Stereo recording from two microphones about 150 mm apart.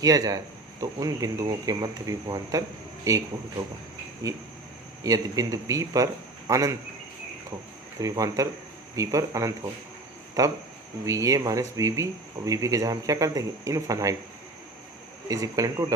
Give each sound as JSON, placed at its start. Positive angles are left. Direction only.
{"t": 0.0, "sound": "speech", "side_deg": -25}
{"t": 4.2, "sound": "speech", "side_deg": -25}
{"t": 7.9, "sound": "speech", "side_deg": -20}
{"t": 15.3, "sound": "speech", "side_deg": -20}